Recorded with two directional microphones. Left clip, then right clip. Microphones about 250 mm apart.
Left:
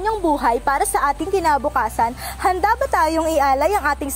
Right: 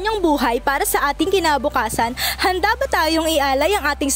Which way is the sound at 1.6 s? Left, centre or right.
Right.